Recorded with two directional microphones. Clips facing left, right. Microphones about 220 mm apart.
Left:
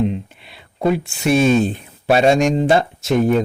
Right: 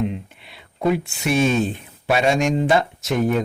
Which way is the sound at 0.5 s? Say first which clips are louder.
Left 2 dB; 35° left (ahead or behind).